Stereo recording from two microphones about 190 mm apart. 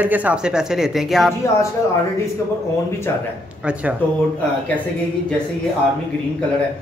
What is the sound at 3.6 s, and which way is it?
Speech, 5° right (ahead or behind).